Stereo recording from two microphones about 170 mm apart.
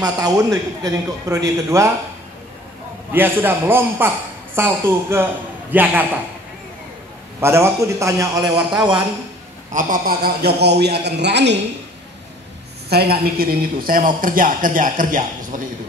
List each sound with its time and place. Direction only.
0.0 s a man's voice: 20° right (ahead or behind)
3.1 s a man's voice: 10° right (ahead or behind)
7.3 s a man's voice: 15° right (ahead or behind)
9.7 s a man's voice: 50° right (ahead or behind); by 11.6 s 90° right
12.9 s speech: 65° right (ahead or behind)